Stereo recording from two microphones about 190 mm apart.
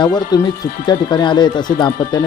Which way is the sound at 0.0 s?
20° left (ahead or behind).